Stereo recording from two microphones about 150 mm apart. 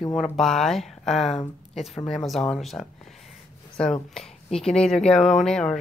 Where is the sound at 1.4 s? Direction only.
40° left (ahead or behind).